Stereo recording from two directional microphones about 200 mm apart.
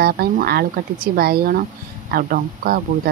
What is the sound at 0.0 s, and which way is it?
Speech, 50° right (ahead or behind).